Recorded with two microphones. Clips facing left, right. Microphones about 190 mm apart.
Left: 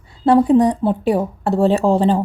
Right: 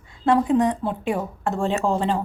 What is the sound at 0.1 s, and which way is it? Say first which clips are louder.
Speech: left 6 dB; 35° left (ahead or behind).